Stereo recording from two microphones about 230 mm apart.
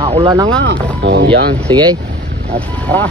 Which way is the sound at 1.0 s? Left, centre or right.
Right.